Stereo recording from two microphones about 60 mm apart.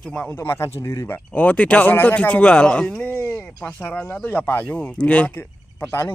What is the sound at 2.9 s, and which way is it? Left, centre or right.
Speech, left.